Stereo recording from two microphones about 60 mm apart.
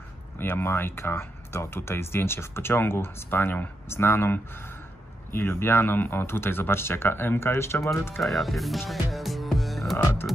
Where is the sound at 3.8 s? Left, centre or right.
Left.